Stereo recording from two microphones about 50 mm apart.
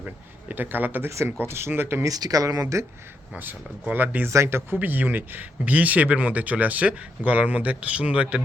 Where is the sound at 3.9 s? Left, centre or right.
Right.